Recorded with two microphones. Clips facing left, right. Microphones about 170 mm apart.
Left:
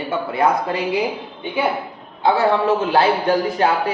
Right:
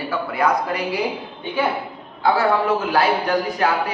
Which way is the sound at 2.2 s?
25° left (ahead or behind).